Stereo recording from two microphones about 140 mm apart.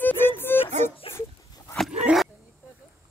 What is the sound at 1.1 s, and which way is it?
Dog, 20° left (ahead or behind).